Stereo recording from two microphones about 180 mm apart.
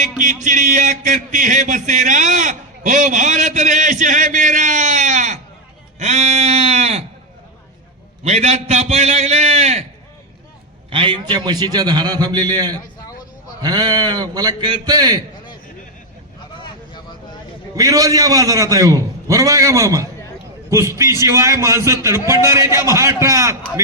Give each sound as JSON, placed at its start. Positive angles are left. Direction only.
{"t": 0.4, "sound": "a man's voice", "side_deg": -45}
{"t": 8.2, "sound": "a man's voice", "side_deg": -40}
{"t": 10.8, "sound": "a man's voice", "side_deg": -30}
{"t": 16.6, "sound": "vehicle", "side_deg": 25}
{"t": 17.7, "sound": "a man's voice", "side_deg": -20}